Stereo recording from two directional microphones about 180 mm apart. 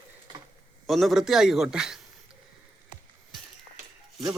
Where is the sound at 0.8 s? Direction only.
Centre (ahead or behind).